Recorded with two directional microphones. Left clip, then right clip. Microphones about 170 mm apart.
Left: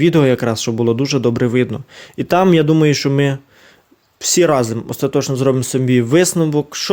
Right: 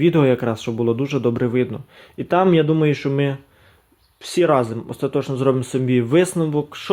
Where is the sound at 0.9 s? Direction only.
30° left (ahead or behind).